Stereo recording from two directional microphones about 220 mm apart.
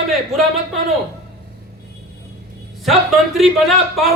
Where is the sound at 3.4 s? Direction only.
Centre (ahead or behind).